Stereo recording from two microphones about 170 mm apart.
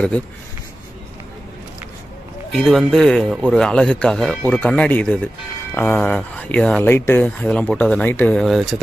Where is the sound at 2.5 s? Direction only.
Centre (ahead or behind).